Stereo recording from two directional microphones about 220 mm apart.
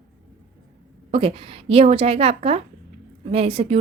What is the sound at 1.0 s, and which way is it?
Speech, 25° right (ahead or behind).